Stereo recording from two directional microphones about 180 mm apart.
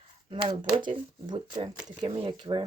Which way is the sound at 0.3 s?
30° right (ahead or behind).